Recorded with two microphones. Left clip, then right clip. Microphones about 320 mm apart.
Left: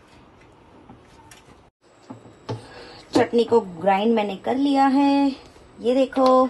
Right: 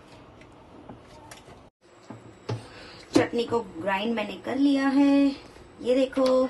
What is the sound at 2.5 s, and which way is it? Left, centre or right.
A woman's voice, left.